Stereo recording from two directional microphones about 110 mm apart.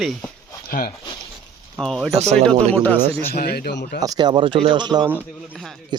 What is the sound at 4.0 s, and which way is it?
Speech, 35° right (ahead or behind).